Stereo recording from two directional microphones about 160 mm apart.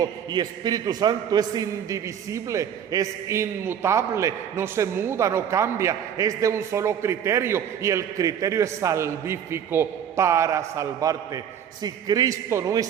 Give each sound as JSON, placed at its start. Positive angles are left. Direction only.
{"t": 0.0, "sound": "a man's voice", "side_deg": -25}